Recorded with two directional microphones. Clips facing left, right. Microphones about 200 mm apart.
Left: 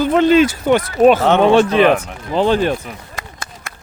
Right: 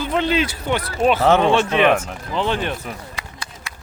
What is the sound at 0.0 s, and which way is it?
Speech, 45° left (ahead or behind).